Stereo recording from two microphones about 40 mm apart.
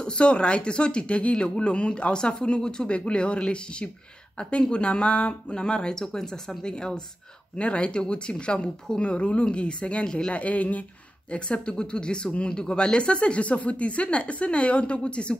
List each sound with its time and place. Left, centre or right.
0.0 s speech: left
10.3 s speech: left
11.3 s speech: left